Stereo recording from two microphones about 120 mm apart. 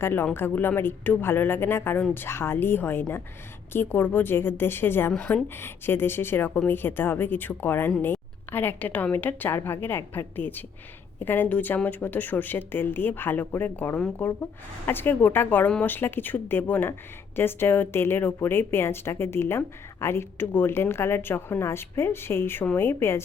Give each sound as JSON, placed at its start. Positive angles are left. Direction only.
{"t": 0.0, "sound": "speech", "side_deg": 15}